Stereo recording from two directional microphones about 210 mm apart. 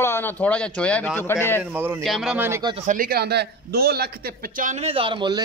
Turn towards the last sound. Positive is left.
turn(degrees=-25)  # may be behind; listen again after turning